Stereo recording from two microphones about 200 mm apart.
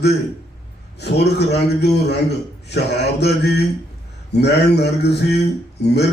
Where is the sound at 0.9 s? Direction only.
55° left (ahead or behind).